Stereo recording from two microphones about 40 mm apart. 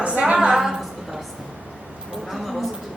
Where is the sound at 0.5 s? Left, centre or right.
Centre.